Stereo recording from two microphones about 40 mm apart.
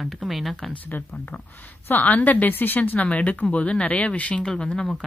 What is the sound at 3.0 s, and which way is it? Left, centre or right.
Speech, left.